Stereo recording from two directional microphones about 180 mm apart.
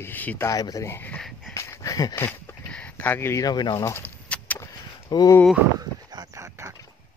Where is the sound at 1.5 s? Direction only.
15° left (ahead or behind).